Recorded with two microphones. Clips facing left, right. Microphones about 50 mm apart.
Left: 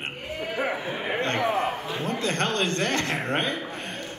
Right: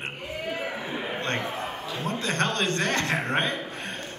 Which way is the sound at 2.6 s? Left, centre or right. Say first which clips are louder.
Even; right.